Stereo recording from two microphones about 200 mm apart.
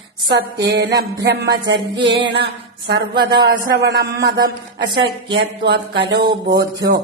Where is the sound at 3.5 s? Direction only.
55° right (ahead or behind).